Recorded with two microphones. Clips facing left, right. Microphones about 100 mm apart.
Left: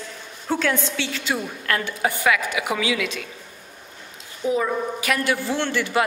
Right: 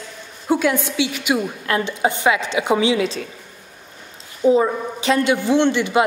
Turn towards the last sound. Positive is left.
turn(degrees=-20)  # may be behind; listen again after turning